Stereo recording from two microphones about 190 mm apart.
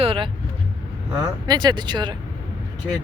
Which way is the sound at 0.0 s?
30° right (ahead or behind).